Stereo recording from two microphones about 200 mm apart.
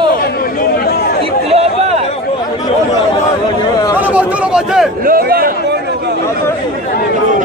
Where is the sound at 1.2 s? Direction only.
30° right (ahead or behind).